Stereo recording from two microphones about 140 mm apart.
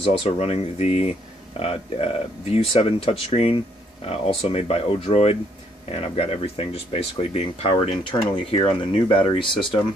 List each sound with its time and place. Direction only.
0.0 s speech: 45° left (ahead or behind)